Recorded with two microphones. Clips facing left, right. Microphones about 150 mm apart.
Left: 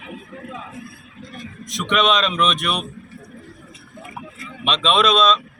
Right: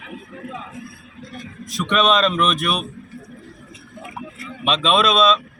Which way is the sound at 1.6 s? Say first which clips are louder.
Right 1 dB; 5° right (ahead or behind).